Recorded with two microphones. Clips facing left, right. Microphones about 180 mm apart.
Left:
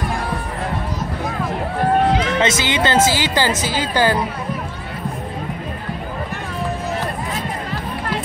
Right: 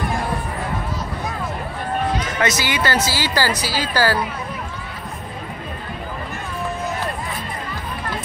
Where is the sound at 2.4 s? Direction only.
25° left (ahead or behind).